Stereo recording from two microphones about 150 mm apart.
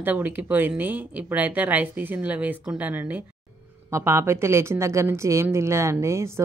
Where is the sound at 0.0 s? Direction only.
10° right (ahead or behind).